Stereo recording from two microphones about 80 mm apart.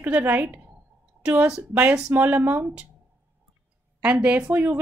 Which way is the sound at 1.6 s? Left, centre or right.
Right.